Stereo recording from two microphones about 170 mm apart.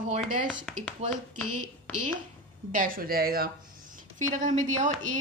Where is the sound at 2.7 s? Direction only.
55° right (ahead or behind).